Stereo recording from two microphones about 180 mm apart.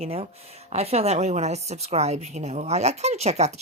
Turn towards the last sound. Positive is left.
turn(degrees=-35)  # may be behind; listen again after turning